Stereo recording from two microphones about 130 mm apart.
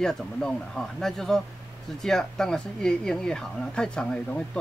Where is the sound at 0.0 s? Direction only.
5° left (ahead or behind).